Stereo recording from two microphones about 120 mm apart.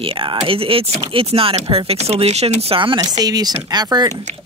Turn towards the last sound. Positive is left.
turn(degrees=-35)  # may be behind; listen again after turning